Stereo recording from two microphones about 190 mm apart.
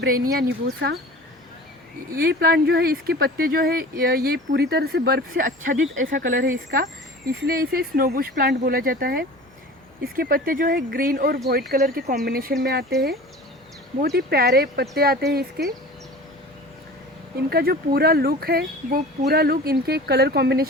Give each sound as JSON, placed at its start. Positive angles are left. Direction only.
{"t": 0.1, "sound": "speech", "side_deg": -65}
{"t": 2.1, "sound": "speech", "side_deg": -50}
{"t": 14.0, "sound": "speech", "side_deg": -55}
{"t": 17.5, "sound": "speech", "side_deg": -55}